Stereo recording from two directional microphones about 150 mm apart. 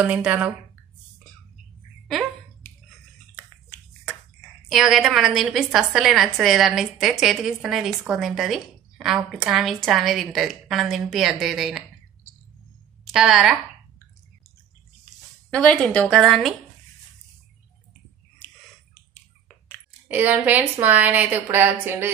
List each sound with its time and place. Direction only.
0.0 s a woman's voice: 10° right (ahead or behind)
2.6 s a sound: 15° left (ahead or behind)
4.6 s a woman's voice: centre (ahead or behind)
13.0 s a woman's voice: centre (ahead or behind)
15.5 s a woman's voice: 5° left (ahead or behind)
18.9 s finger snapping: 15° left (ahead or behind)
20.1 s a woman's voice: 10° right (ahead or behind)